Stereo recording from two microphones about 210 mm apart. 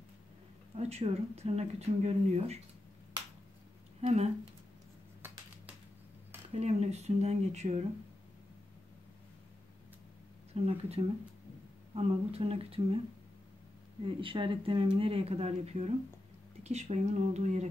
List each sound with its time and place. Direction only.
0.7 s speech: 30° right (ahead or behind)
4.0 s speech: 30° right (ahead or behind)
6.5 s speech: 30° right (ahead or behind)
10.5 s speech: 30° right (ahead or behind)
14.0 s speech: 25° right (ahead or behind)